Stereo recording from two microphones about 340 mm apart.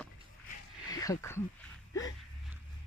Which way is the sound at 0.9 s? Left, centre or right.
Centre.